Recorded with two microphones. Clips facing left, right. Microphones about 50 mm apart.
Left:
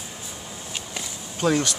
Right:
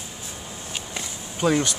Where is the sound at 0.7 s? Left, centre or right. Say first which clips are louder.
Right 1 dB; centre.